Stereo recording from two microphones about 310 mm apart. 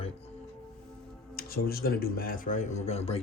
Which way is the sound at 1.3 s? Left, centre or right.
Left.